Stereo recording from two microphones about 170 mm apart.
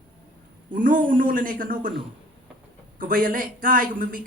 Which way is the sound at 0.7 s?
50° right (ahead or behind).